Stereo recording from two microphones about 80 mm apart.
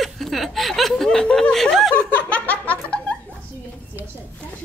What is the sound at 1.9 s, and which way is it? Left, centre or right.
Laughter, centre.